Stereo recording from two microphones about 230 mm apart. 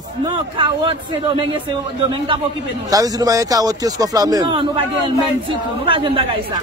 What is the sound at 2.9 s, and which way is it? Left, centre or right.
Speech, centre.